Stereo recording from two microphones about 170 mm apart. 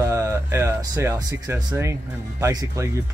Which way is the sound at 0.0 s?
15° right (ahead or behind).